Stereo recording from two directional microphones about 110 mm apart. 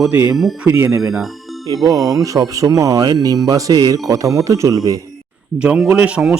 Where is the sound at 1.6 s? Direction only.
35° right (ahead or behind).